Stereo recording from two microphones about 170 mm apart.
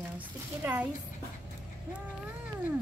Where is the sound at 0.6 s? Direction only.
10° right (ahead or behind).